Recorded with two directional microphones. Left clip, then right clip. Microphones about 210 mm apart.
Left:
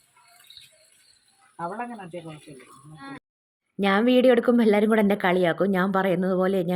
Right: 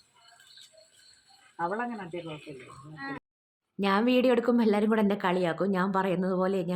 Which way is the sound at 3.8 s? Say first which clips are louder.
Left 5 dB; 20° left (ahead or behind).